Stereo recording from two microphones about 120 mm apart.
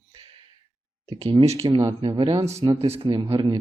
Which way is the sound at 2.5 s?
50° right (ahead or behind).